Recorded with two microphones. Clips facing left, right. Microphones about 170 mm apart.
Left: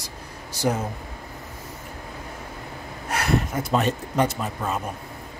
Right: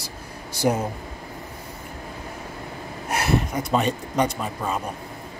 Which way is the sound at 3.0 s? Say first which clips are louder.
Right 1 dB; 10° right (ahead or behind).